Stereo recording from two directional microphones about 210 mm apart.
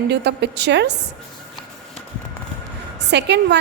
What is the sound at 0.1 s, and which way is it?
Speech, 55° right (ahead or behind).